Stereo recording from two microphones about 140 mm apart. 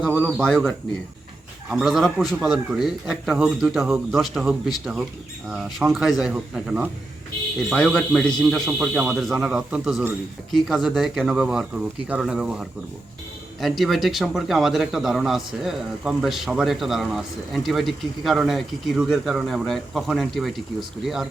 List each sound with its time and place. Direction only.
0.3 s speech: centre (ahead or behind)
7.7 s speech: 5° left (ahead or behind)